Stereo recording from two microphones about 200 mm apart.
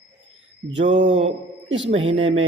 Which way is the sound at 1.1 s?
30° right (ahead or behind).